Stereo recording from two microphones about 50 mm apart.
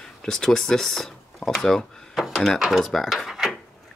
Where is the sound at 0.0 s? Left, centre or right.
Centre.